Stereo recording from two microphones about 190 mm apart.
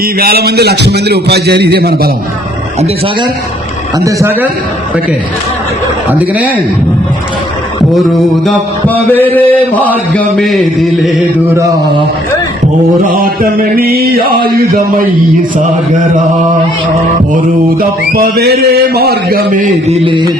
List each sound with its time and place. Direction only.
0.0 s a man's voice: 55° right (ahead or behind)
3.9 s speech: 15° right (ahead or behind)
6.1 s speech: 10° right (ahead or behind)
8.4 s mantra: 10° left (ahead or behind)
13.1 s mantra: 50° right (ahead or behind)
17.3 s mantra: 50° right (ahead or behind)
20.1 s mantra: 25° right (ahead or behind)